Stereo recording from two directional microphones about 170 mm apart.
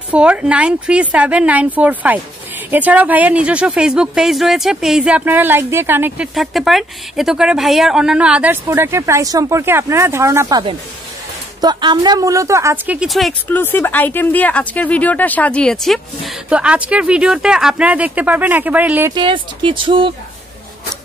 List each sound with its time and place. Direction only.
0.1 s a woman's voice: 5° right (ahead or behind)
6.3 s a woman's voice: centre (ahead or behind); by 10.6 s 15° right (ahead or behind)
11.6 s a woman's voice: 25° right (ahead or behind); by 13.6 s centre (ahead or behind)
13.6 s a woman's voice: 10° left (ahead or behind); by 19.1 s 10° right (ahead or behind)
19.1 s speech: 30° right (ahead or behind)